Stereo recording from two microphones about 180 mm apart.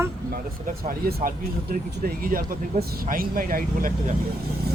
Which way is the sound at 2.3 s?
50° right (ahead or behind).